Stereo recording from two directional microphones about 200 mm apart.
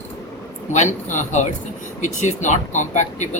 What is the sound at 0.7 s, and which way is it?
A man's voice, 35° left (ahead or behind).